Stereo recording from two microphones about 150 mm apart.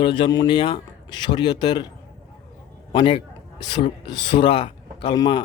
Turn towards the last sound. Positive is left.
turn(degrees=30)  # may be behind; listen again after turning